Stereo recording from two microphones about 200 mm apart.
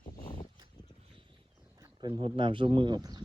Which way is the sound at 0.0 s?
45° left (ahead or behind).